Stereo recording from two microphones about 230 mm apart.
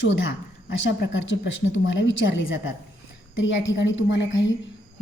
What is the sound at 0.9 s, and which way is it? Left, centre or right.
A woman's voice, left.